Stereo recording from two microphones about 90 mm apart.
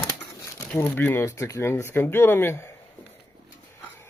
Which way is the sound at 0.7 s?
25° left (ahead or behind).